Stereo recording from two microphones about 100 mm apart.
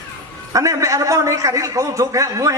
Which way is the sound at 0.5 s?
35° right (ahead or behind).